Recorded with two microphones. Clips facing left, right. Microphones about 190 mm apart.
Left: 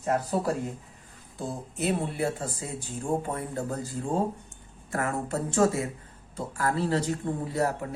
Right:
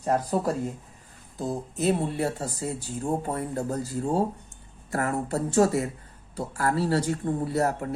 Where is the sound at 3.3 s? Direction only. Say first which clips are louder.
Right 3 dB; 40° right (ahead or behind).